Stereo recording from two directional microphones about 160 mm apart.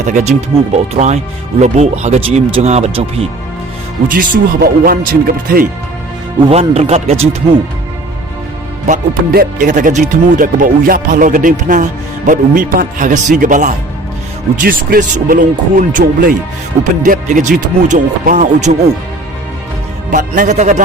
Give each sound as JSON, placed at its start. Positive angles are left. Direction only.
{"t": 0.0, "sound": "speech", "side_deg": -45}
{"t": 4.1, "sound": "speech", "side_deg": -60}
{"t": 6.5, "sound": "speech", "side_deg": -40}
{"t": 9.3, "sound": "speech", "side_deg": -65}
{"t": 20.1, "sound": "speech", "side_deg": -60}